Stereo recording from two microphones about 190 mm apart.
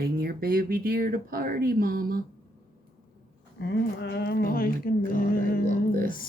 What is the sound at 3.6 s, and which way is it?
Speech, 65° left (ahead or behind).